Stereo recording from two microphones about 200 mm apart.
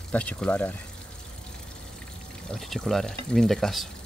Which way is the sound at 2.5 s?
Centre (ahead or behind).